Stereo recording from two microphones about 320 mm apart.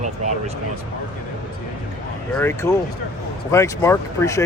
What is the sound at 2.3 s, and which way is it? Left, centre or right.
Speech, centre.